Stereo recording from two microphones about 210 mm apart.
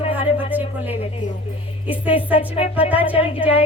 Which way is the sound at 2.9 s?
5° right (ahead or behind).